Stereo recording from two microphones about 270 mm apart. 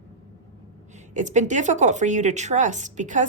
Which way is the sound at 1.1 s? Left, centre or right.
Right.